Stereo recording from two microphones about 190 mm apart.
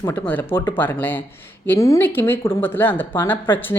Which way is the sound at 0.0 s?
10° left (ahead or behind).